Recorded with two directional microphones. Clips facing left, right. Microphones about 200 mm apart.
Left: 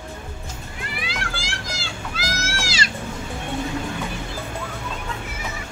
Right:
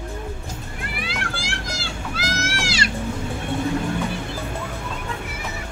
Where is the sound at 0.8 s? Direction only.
60° right (ahead or behind).